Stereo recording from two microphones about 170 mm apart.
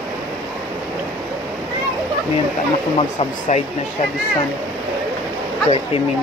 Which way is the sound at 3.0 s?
40° left (ahead or behind).